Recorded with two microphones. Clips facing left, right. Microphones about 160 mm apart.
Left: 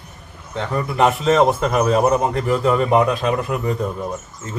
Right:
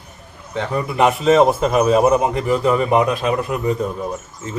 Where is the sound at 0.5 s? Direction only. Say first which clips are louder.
Right 1 dB; 10° right (ahead or behind).